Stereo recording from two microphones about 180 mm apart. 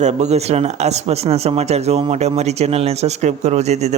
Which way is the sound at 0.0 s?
40° right (ahead or behind).